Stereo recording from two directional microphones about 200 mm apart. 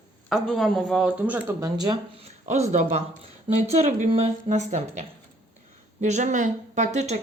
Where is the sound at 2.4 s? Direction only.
35° right (ahead or behind).